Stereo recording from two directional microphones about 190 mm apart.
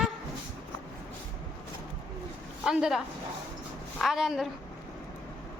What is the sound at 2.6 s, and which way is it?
A woman's voice, 5° right (ahead or behind).